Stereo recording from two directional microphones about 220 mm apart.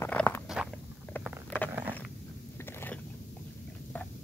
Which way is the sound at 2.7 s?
10° left (ahead or behind).